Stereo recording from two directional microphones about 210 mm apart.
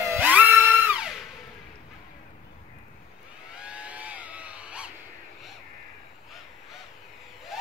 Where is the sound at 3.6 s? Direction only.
5° right (ahead or behind).